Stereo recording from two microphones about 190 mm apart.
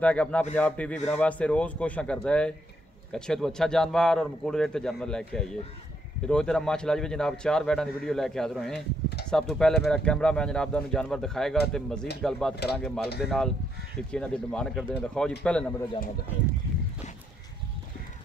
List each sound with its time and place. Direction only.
0.0 s speech: 5° left (ahead or behind)